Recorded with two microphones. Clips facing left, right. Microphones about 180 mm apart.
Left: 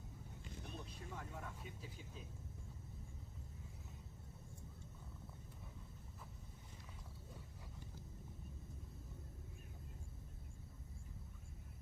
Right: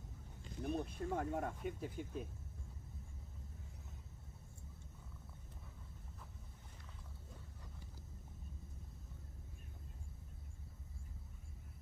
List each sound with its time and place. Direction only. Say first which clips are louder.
0.6 s speech: right 14 dB; 50° right (ahead or behind)